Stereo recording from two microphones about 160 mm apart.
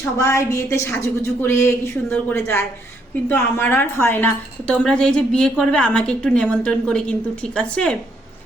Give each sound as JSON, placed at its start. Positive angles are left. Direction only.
{"t": 0.0, "sound": "a woman's voice", "side_deg": 15}